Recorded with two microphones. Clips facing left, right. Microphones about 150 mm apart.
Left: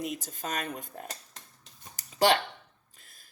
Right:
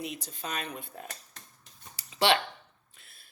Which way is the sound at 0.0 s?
45° left (ahead or behind).